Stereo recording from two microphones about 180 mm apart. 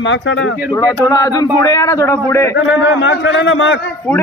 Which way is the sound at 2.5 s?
90° left.